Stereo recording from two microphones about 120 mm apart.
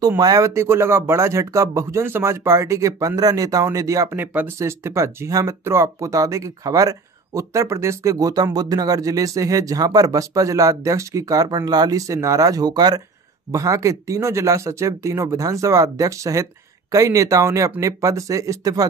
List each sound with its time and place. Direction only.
0.2 s speech: 30° right (ahead or behind)